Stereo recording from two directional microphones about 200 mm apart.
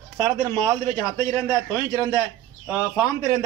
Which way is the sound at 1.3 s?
15° left (ahead or behind).